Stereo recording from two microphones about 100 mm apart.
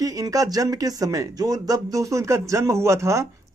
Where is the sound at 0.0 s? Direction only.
35° right (ahead or behind).